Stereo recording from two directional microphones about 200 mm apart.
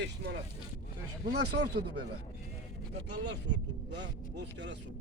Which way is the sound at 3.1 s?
65° right (ahead or behind).